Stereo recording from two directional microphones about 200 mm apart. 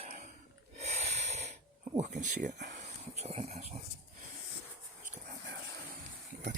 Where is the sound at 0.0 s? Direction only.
35° right (ahead or behind).